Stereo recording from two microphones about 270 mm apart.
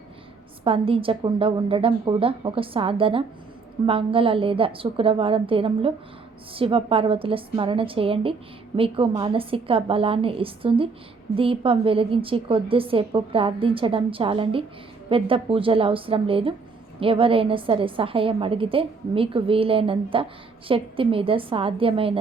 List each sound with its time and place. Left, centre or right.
0.6 s a woman's voice: centre